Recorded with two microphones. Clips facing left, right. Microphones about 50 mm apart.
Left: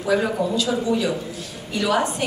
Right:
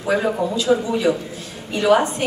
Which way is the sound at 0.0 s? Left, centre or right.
Right.